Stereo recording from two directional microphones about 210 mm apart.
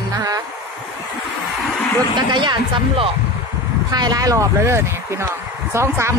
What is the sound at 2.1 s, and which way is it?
Speech, 20° right (ahead or behind).